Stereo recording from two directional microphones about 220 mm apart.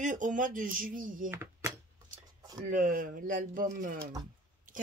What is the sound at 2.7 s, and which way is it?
Speech, 40° right (ahead or behind).